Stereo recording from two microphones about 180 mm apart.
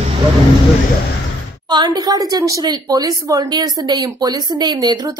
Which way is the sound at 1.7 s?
25° right (ahead or behind).